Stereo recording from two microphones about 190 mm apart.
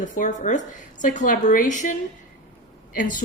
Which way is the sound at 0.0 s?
40° left (ahead or behind).